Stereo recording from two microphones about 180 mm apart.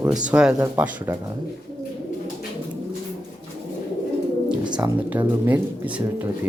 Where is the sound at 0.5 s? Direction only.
20° right (ahead or behind).